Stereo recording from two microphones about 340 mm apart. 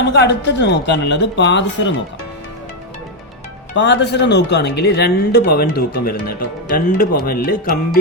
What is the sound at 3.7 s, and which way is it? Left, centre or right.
Speech, left.